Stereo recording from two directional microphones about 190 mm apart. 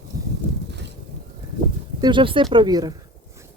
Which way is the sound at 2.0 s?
25° right (ahead or behind).